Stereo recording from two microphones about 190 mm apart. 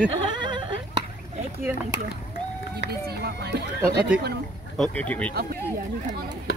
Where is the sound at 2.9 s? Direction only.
55° right (ahead or behind).